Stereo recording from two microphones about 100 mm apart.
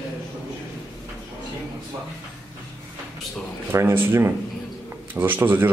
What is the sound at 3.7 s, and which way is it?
Speech, 20° right (ahead or behind).